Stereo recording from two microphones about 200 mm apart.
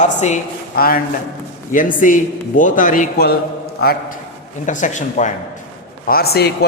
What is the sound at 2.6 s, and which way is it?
A man's voice, 40° left (ahead or behind).